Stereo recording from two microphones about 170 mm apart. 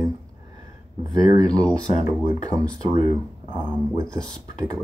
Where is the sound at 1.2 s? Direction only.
20° right (ahead or behind).